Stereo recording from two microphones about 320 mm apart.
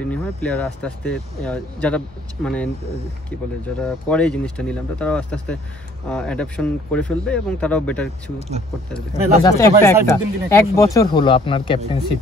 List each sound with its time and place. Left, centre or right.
0.0 s speech: centre
3.8 s speech: centre
8.4 s speech: centre
8.9 s speech: centre